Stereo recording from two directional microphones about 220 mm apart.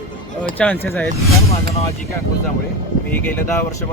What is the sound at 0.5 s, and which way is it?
Speech, 5° left (ahead or behind).